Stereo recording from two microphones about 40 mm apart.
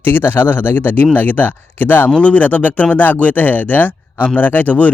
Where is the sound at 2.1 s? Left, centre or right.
Left.